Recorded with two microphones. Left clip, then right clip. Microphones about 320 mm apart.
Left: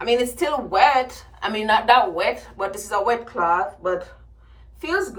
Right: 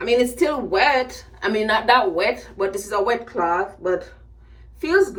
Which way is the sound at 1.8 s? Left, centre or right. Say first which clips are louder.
Even; left.